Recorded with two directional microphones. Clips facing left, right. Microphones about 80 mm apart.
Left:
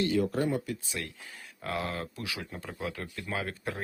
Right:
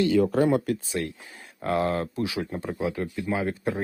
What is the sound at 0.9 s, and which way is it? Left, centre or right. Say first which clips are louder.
Speech: right 8 dB; right.